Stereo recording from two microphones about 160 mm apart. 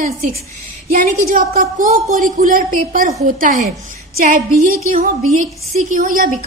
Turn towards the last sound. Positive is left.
turn(degrees=-60)  # may be behind; listen again after turning